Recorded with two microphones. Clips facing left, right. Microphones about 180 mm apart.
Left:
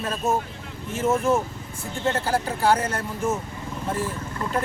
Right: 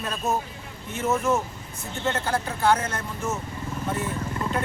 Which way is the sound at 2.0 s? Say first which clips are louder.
Left 2 dB; 30° left (ahead or behind).